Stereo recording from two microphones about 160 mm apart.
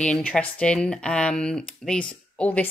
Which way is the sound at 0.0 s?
5° left (ahead or behind).